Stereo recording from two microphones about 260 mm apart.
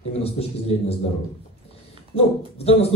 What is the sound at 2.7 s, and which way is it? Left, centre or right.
Speech, left.